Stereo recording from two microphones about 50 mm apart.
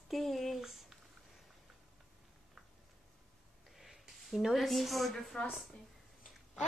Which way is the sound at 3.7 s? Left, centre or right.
Centre.